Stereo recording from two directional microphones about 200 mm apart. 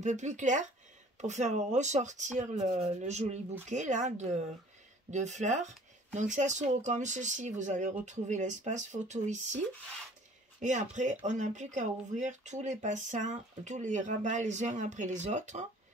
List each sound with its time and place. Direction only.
0.0 s speech: 35° right (ahead or behind)
10.6 s speech: 35° right (ahead or behind)